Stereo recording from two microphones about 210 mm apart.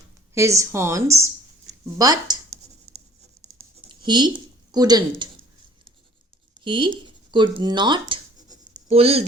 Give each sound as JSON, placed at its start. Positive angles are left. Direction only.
{"t": 0.3, "sound": "a woman's voice", "side_deg": -15}
{"t": 3.4, "sound": "a sound", "side_deg": -20}
{"t": 6.7, "sound": "speech", "side_deg": -20}
{"t": 7.0, "sound": "writing", "side_deg": -20}